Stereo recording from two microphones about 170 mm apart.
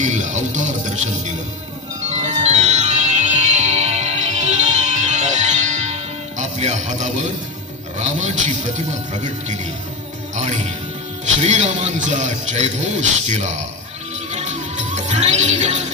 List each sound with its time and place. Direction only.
0.0 s speech: 45° right (ahead or behind)
2.0 s bell: 40° right (ahead or behind)
7.9 s speech: 45° right (ahead or behind)
14.3 s music: 45° right (ahead or behind)